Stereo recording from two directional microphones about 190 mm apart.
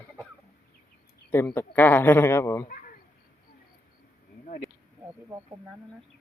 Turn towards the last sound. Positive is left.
turn(degrees=-15)  # may be behind; listen again after turning